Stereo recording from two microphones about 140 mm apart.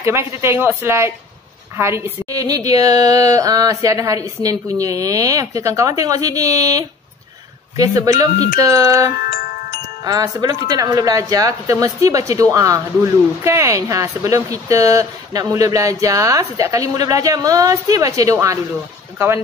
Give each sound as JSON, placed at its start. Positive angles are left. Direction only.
{"t": 0.0, "sound": "speech", "side_deg": -20}